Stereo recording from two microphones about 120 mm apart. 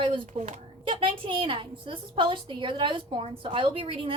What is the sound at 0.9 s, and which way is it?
A woman's voice, 50° right (ahead or behind).